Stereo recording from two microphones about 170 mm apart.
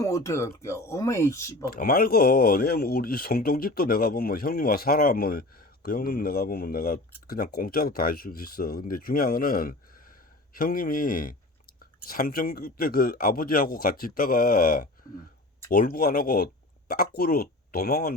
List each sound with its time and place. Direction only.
0.0 s speech: 20° left (ahead or behind)
1.6 s speech: 60° left (ahead or behind)